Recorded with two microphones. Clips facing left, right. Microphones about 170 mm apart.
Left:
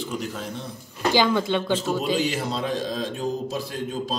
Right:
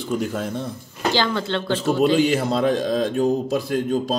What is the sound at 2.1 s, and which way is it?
A man's voice, 55° right (ahead or behind).